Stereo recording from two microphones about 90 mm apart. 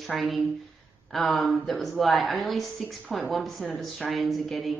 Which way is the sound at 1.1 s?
Centre (ahead or behind).